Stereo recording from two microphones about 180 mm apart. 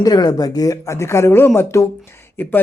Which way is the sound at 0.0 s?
20° left (ahead or behind).